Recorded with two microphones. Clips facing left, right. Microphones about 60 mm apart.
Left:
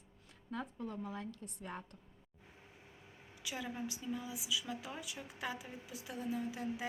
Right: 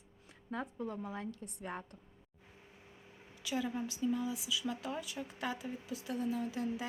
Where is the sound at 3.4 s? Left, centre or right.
Centre.